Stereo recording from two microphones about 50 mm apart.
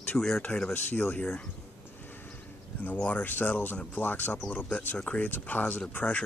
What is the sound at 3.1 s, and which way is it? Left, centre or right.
Speech, left.